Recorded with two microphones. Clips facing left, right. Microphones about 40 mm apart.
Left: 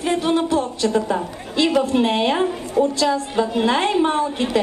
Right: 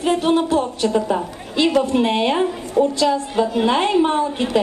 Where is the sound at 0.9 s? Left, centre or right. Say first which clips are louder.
Right 1 dB; centre.